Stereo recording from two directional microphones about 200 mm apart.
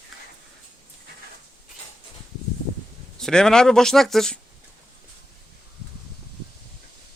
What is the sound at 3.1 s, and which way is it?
Speech, 5° left (ahead or behind).